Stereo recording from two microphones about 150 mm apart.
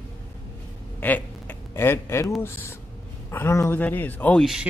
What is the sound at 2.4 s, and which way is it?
Speech, 15° left (ahead or behind).